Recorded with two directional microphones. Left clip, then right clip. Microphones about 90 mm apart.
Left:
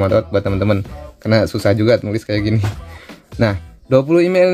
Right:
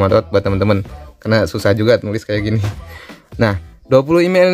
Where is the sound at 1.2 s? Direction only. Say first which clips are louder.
Even; 25° right (ahead or behind).